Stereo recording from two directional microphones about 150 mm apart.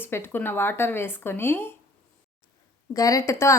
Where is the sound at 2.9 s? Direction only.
25° left (ahead or behind).